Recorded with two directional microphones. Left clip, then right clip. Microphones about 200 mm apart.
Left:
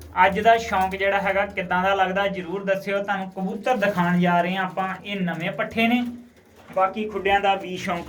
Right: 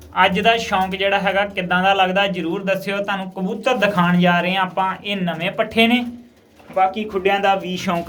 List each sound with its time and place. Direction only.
0.2 s speech: 10° right (ahead or behind)